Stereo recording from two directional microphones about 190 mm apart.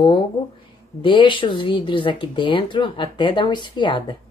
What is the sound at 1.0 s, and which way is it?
Speech, 25° left (ahead or behind).